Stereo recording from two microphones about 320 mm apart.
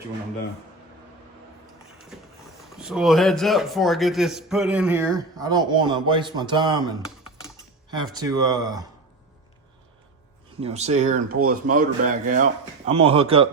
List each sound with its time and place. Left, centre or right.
2.1 s a sound: centre
2.7 s a man's voice: centre
8.1 s speech: centre
10.6 s speech: centre